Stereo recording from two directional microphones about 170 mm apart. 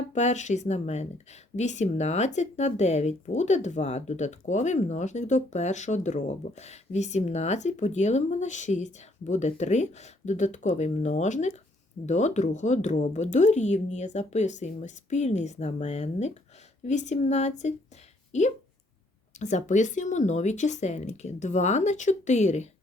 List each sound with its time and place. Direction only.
0.1 s speech: 45° left (ahead or behind)